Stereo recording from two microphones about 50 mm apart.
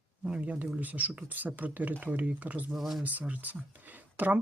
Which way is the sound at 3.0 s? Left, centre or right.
Right.